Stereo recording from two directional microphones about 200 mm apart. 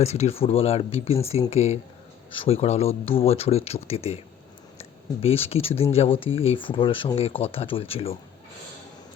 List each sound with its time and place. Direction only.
0.0 s speech: 30° left (ahead or behind)